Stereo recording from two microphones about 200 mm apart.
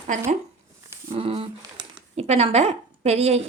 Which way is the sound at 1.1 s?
30° right (ahead or behind).